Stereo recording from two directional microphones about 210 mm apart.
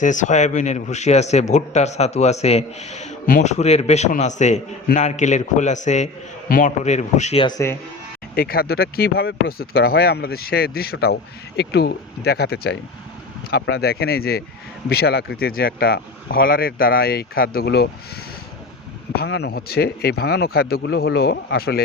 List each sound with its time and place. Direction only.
0.0 s speech: 35° left (ahead or behind)
8.4 s speech: 45° left (ahead or behind)
19.1 s speech: 50° left (ahead or behind)